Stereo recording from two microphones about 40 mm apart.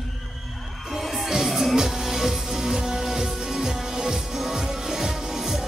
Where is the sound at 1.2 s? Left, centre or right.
Centre.